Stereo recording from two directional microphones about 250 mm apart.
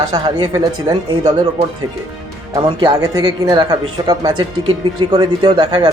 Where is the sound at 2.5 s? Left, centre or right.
Centre.